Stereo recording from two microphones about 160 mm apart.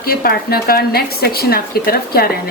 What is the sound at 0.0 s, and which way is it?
Speech, 70° left (ahead or behind).